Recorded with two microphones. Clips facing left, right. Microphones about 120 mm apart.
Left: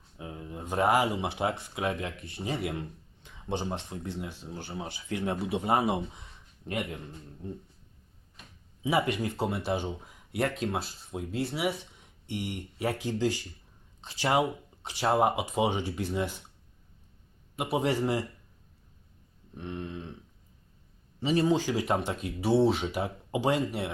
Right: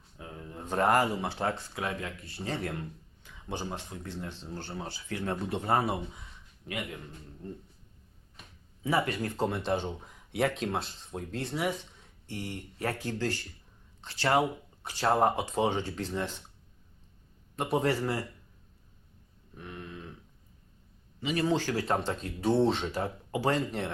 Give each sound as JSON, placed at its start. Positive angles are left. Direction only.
{"t": 0.2, "sound": "speech", "side_deg": 15}
{"t": 8.8, "sound": "speech", "side_deg": 15}
{"t": 17.6, "sound": "speech", "side_deg": 10}
{"t": 19.5, "sound": "a sound", "side_deg": 25}
{"t": 21.2, "sound": "a man's voice", "side_deg": 35}
{"t": 21.4, "sound": "speech", "side_deg": 15}